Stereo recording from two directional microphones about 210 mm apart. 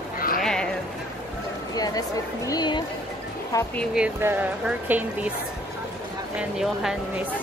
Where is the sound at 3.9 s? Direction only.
10° right (ahead or behind).